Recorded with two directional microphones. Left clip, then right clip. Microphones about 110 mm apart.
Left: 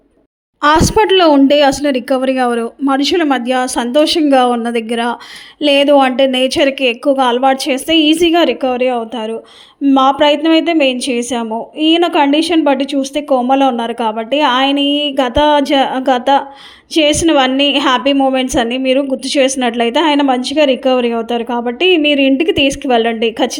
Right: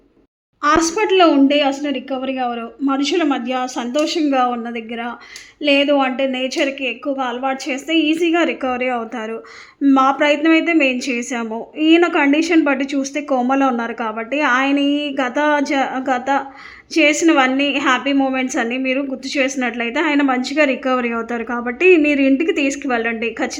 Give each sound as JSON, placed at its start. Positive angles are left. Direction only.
{"t": 0.6, "sound": "a woman's voice", "side_deg": 75}
{"t": 2.9, "sound": "a woman's voice", "side_deg": 45}
{"t": 6.7, "sound": "a woman's voice", "side_deg": 60}
{"t": 8.4, "sound": "a woman's voice", "side_deg": 35}
{"t": 9.9, "sound": "a woman's voice", "side_deg": 40}